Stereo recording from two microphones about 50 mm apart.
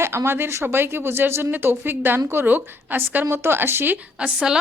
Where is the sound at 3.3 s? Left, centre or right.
Right.